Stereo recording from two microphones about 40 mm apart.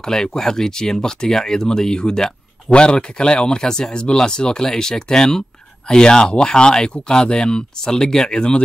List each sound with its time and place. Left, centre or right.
0.0 s speech: centre